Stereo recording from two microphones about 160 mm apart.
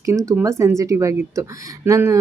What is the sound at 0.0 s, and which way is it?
Speech, 20° right (ahead or behind).